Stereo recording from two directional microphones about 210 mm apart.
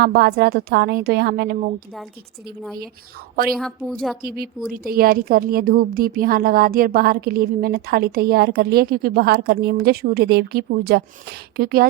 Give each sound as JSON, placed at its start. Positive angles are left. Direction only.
{"t": 0.0, "sound": "a woman's voice", "side_deg": -50}
{"t": 3.5, "sound": "a woman's voice", "side_deg": 0}
{"t": 4.2, "sound": "a woman's voice", "side_deg": -45}